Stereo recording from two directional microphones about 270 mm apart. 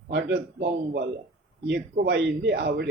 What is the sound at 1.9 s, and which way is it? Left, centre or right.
Mantra, right.